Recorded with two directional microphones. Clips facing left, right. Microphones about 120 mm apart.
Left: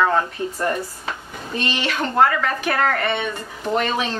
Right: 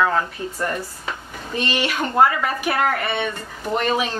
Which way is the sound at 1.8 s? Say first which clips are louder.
Even; 10° right (ahead or behind).